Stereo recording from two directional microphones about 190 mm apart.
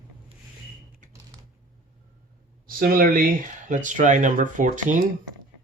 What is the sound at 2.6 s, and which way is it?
Speech, 50° right (ahead or behind).